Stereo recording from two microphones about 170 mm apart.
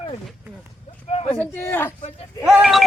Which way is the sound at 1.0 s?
35° left (ahead or behind).